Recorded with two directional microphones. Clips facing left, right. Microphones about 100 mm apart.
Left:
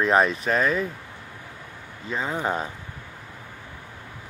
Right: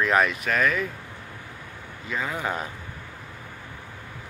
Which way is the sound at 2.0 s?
30° left (ahead or behind).